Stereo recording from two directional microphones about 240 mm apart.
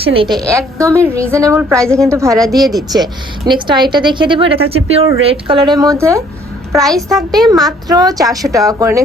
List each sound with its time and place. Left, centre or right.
0.0 s a woman's voice: right
6.8 s a child's voice: centre
7.4 s a woman's voice: centre